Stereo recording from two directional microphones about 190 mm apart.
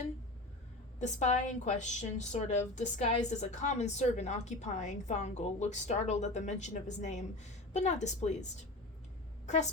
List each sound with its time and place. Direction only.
0.9 s a woman's voice: 40° left (ahead or behind)